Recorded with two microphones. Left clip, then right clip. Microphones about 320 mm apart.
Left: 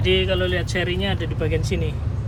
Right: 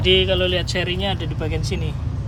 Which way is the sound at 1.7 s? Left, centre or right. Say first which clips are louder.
Left 2 dB; right.